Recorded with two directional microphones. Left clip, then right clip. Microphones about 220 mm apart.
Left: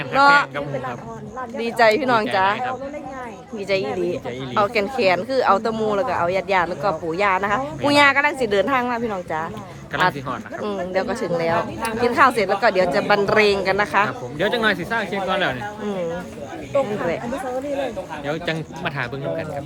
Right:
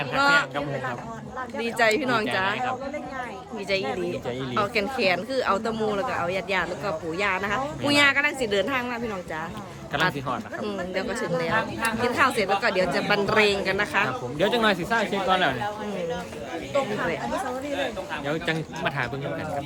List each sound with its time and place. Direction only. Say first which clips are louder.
0.2 s speech: left 7 dB; 20° left (ahead or behind)
1.5 s speech: left 6 dB; 15° left (ahead or behind)
3.7 s speech: left 5 dB; 15° left (ahead or behind)
9.9 s speech: left 5 dB; centre (ahead or behind)
10.6 s speech: left 6 dB; 15° left (ahead or behind)
14.3 s speech: left 2 dB; 5° right (ahead or behind)
18.3 s speech: left 3 dB; 5° left (ahead or behind)